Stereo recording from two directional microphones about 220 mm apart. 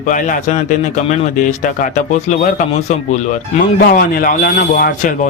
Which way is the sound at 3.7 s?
40° left (ahead or behind).